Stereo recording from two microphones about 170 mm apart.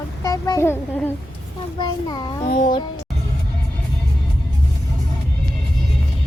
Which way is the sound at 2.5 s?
50° left (ahead or behind).